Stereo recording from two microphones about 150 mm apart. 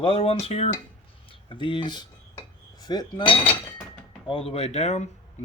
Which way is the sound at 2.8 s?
25° left (ahead or behind).